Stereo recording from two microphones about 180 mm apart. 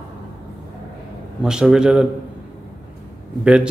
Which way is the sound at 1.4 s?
5° right (ahead or behind).